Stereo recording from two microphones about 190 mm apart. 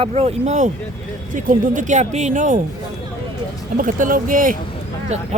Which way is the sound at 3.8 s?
45° right (ahead or behind).